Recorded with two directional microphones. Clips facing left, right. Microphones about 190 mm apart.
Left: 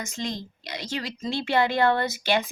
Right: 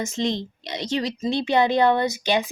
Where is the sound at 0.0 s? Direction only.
25° right (ahead or behind).